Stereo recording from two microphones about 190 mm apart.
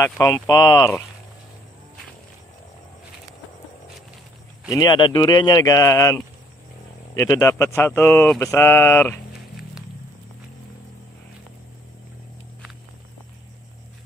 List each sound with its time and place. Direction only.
0.0 s speech: 15° left (ahead or behind)
4.6 s speech: 20° left (ahead or behind)